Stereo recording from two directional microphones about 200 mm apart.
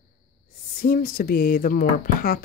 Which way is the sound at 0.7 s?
50° left (ahead or behind).